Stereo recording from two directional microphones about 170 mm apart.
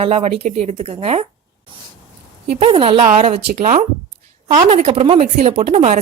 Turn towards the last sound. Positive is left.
turn(degrees=-40)  # may be behind; listen again after turning